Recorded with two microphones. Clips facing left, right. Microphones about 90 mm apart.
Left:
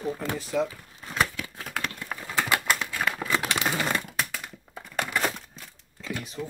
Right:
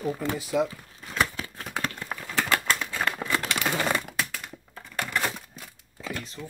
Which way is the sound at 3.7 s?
30° left (ahead or behind).